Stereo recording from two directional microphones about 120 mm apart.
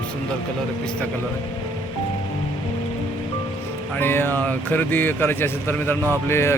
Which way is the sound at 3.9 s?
20° left (ahead or behind).